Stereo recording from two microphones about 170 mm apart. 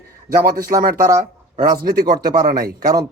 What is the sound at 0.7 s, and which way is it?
Speech, 55° right (ahead or behind).